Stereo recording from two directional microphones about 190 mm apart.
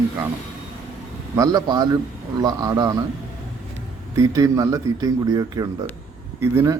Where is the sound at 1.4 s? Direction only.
20° right (ahead or behind).